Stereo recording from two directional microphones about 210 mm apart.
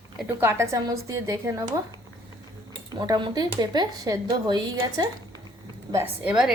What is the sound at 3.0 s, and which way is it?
Speech, 20° right (ahead or behind).